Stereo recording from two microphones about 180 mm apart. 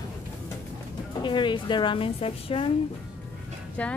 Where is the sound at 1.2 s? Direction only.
25° left (ahead or behind).